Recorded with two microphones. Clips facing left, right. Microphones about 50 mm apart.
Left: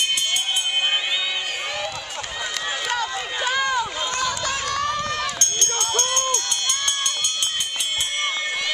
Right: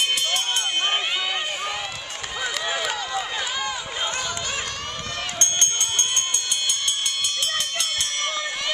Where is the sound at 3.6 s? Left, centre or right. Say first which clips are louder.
Left 7 dB; left.